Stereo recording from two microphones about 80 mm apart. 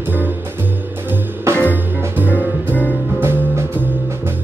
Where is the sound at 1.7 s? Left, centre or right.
Right.